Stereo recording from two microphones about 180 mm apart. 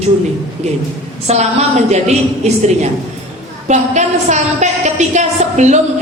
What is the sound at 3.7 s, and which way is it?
A woman's voice, 40° right (ahead or behind).